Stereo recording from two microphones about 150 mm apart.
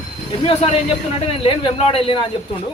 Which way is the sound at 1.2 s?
40° left (ahead or behind).